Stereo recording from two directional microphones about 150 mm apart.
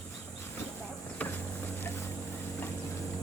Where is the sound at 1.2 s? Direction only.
10° left (ahead or behind).